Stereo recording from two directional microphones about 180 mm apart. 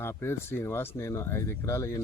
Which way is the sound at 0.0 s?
15° left (ahead or behind).